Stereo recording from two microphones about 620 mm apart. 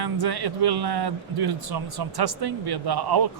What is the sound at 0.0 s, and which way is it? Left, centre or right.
A man's voice, right.